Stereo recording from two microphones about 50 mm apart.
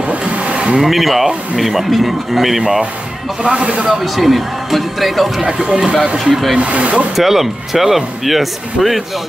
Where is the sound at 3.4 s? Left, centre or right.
Right.